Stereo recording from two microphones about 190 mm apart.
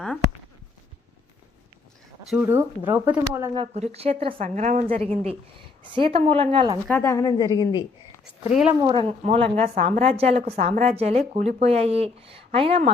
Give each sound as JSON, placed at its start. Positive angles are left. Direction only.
{"t": 2.3, "sound": "speech", "side_deg": -10}
{"t": 3.5, "sound": "a woman's voice", "side_deg": -30}
{"t": 6.8, "sound": "a woman's voice", "side_deg": 10}
{"t": 8.8, "sound": "speech", "side_deg": -25}